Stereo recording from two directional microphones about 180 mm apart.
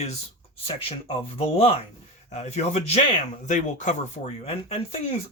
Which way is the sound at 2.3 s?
40° left (ahead or behind).